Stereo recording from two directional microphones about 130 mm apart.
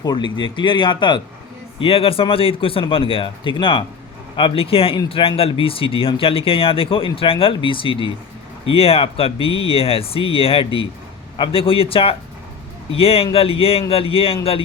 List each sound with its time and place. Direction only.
0.0 s speech: 35° left (ahead or behind)